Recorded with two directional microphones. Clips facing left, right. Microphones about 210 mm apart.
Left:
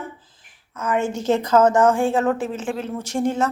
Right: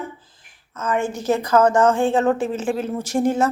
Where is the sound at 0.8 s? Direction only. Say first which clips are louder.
Even; 20° left (ahead or behind).